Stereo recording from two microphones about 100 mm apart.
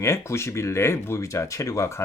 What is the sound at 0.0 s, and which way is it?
Speech, 30° left (ahead or behind).